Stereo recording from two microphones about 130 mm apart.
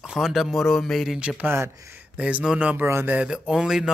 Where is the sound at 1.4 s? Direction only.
20° right (ahead or behind).